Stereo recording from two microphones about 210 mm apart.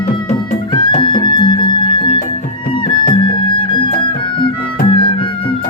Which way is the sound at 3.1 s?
25° left (ahead or behind).